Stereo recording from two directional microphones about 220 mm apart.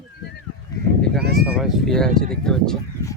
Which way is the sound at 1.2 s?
45° right (ahead or behind).